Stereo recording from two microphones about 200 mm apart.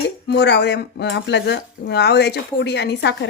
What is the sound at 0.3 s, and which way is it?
Speech, 60° left (ahead or behind).